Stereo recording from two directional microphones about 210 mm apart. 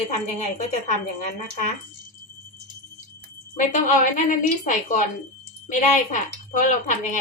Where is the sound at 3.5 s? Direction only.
35° left (ahead or behind).